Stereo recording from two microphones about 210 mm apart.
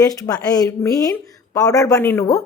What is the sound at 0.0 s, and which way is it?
Speech, 15° left (ahead or behind).